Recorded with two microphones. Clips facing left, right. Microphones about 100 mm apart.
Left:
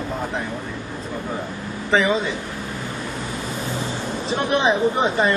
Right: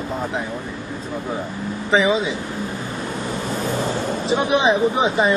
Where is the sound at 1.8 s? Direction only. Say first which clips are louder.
Right 1 dB; centre (ahead or behind).